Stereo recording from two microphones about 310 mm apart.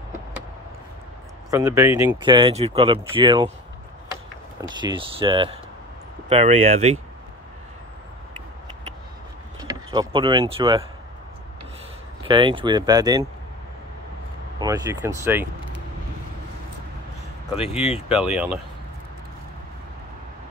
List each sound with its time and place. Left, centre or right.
1.5 s speech: centre
9.6 s speech: centre
12.3 s speech: centre
14.6 s speech: centre
18.0 s speech: centre